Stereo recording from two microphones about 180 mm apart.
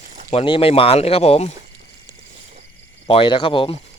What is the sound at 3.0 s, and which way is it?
Speech, 30° left (ahead or behind).